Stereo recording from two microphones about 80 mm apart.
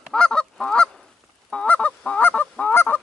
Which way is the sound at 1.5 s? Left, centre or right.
Centre.